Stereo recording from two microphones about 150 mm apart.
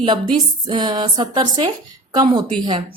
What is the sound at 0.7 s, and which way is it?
A woman's voice, 30° right (ahead or behind).